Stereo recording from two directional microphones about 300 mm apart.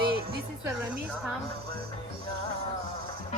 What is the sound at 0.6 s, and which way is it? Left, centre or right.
Speech, centre.